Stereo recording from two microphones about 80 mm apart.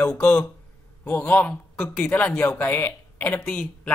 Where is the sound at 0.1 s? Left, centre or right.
Centre.